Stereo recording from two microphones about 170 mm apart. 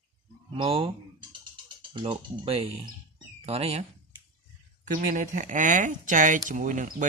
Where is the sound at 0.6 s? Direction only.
35° right (ahead or behind).